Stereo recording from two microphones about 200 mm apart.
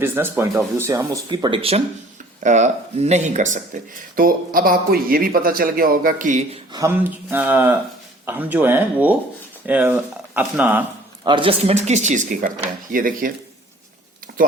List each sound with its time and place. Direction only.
0.0 s speech: 10° right (ahead or behind); by 6.6 s 40° right (ahead or behind)
6.7 s speech: 10° right (ahead or behind)
11.3 s speech: 25° right (ahead or behind); by 13.3 s 45° right (ahead or behind)